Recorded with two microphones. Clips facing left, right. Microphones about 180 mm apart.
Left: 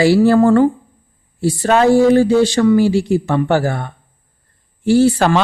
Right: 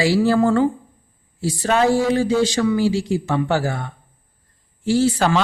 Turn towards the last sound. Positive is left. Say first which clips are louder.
# left 5 dB
turn(degrees=60)  # may be behind; listen again after turning